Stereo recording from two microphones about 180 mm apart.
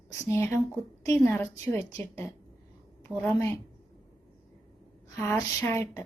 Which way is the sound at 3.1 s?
10° left (ahead or behind).